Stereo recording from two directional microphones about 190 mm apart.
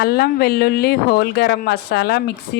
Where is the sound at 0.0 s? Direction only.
55° left (ahead or behind).